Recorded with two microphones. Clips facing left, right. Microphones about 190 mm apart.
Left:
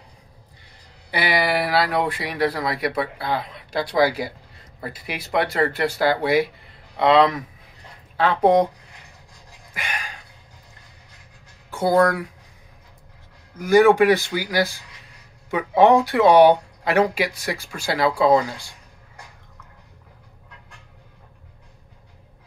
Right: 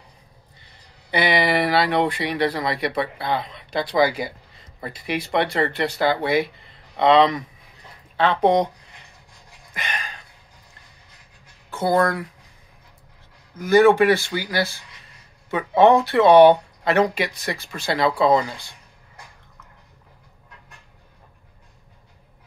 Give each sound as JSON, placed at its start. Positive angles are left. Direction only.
{"t": 1.1, "sound": "speech", "side_deg": 5}
{"t": 9.8, "sound": "a sound", "side_deg": 10}
{"t": 12.0, "sound": "speech", "side_deg": 10}
{"t": 13.6, "sound": "speech", "side_deg": 15}